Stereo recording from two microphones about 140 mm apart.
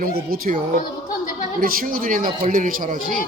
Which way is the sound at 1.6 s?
90° right.